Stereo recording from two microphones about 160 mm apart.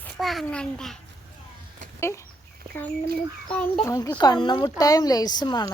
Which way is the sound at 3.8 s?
20° left (ahead or behind).